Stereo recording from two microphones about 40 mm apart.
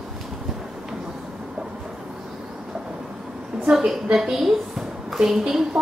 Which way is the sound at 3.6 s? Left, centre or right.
Centre.